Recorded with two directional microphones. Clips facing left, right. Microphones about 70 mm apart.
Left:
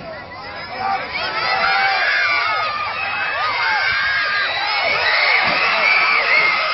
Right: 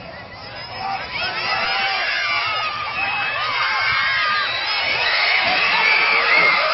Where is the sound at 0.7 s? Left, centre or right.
Left.